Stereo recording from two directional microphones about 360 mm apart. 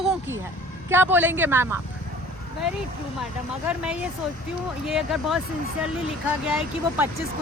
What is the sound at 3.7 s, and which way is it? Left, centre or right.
Speech, centre.